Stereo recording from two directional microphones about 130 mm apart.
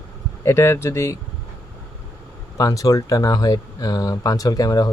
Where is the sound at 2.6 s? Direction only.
25° left (ahead or behind).